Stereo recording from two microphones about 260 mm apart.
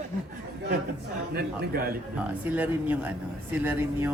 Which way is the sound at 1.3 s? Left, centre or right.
Right.